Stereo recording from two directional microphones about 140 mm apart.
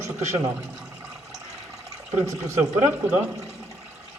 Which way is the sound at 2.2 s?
15° right (ahead or behind).